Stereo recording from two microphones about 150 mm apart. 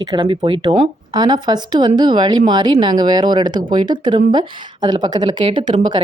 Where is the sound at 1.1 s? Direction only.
25° right (ahead or behind).